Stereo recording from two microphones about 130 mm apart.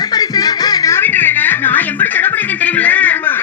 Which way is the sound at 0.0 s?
30° left (ahead or behind).